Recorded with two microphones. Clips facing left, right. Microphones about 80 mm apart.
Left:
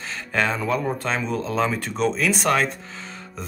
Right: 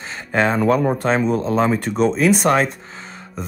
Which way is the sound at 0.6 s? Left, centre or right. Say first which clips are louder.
Right 7 dB; right.